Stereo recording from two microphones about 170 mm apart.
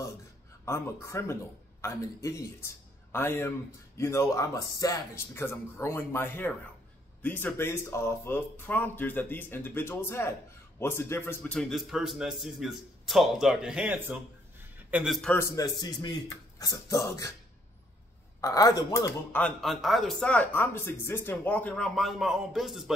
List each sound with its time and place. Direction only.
0.7 s a man's voice: 15° left (ahead or behind); by 15.1 s 10° right (ahead or behind)
15.2 s speech: 15° left (ahead or behind)
18.4 s speech: 20° left (ahead or behind); by 22.9 s centre (ahead or behind)